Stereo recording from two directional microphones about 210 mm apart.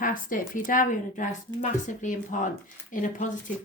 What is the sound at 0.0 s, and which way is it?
Speech, 40° left (ahead or behind).